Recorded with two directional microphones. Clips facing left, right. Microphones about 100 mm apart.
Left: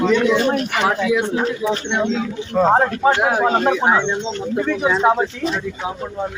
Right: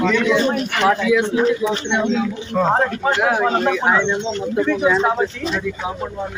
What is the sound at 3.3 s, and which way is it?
A man's voice, 15° left (ahead or behind).